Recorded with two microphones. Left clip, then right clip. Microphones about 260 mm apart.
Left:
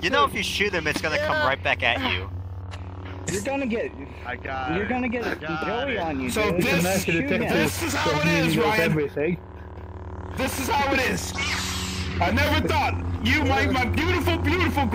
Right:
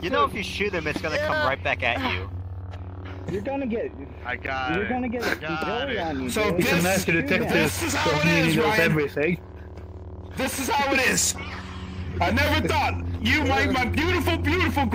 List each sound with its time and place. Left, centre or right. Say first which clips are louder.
0.0 s speech: left 2 dB; centre
1.2 s speech: even; centre
3.4 s speech: left 1 dB; left
4.3 s speech: right 2 dB; centre
4.9 s speech: left 1 dB; left
5.2 s speech: right 1 dB; centre
6.2 s a man's voice: even; centre
8.9 s speech: right 1 dB; centre
10.3 s a man's voice: even; centre
11.3 s a sound: left 9 dB; left
12.2 s a man's voice: even; centre